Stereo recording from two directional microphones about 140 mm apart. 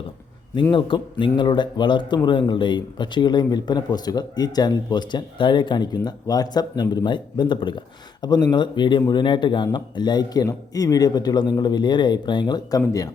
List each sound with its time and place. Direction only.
0.7 s speech: 35° left (ahead or behind)